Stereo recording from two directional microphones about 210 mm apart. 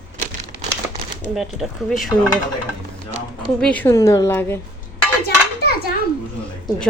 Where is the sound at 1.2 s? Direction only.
Centre (ahead or behind).